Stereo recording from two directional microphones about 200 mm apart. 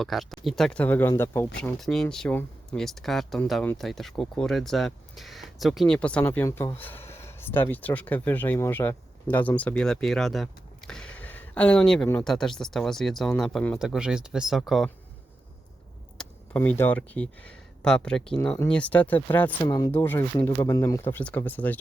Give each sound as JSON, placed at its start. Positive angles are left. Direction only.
{"t": 0.0, "sound": "speech", "side_deg": 0}
{"t": 16.1, "sound": "speech", "side_deg": 10}
{"t": 19.6, "sound": "speech", "side_deg": 20}